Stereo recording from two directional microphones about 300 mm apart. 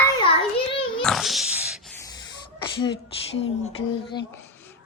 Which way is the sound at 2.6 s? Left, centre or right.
Centre.